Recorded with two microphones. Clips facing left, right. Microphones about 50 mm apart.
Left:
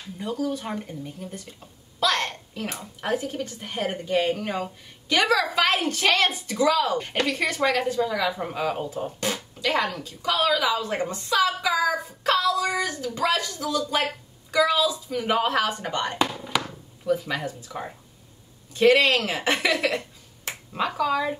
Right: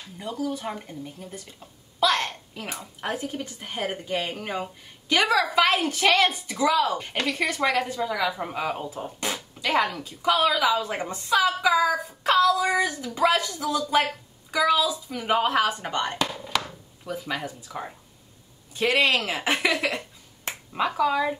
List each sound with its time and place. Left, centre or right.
0.2 s a woman's voice: centre
8.9 s fart: centre
10.0 s a woman's voice: centre
16.3 s a sound: centre
17.1 s a woman's voice: centre
17.6 s speech: centre
19.1 s a woman's voice: centre